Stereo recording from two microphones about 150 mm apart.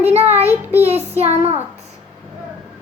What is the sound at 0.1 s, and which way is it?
Child singing, 45° right (ahead or behind).